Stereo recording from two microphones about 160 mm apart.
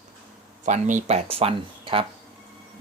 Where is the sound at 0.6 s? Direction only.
50° right (ahead or behind).